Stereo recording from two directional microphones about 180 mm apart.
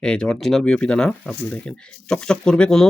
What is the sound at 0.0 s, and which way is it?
Speech, 5° left (ahead or behind).